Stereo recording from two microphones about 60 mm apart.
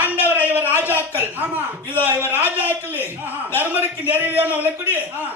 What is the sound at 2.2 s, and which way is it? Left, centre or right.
A man's voice, right.